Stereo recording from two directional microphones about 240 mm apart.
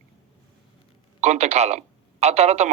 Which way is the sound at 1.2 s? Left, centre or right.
Right.